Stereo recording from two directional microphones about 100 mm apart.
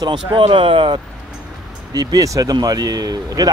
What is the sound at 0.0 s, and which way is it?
Speech, 45° right (ahead or behind).